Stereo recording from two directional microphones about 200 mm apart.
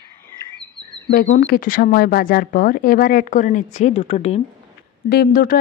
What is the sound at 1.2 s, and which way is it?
Speech, 40° left (ahead or behind).